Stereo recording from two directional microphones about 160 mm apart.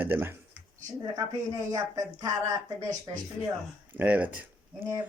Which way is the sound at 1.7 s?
20° right (ahead or behind).